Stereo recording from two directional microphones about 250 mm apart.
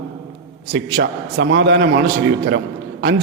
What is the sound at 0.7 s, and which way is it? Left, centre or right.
A man's voice, right.